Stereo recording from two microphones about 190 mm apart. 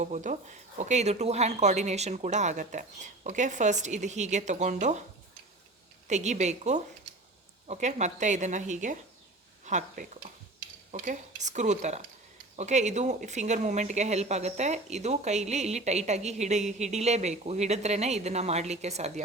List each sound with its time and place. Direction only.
0.0 s speech: 40° right (ahead or behind)
6.1 s speech: 40° right (ahead or behind)